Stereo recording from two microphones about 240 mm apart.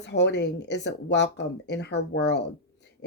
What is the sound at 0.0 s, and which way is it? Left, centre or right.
Speech, left.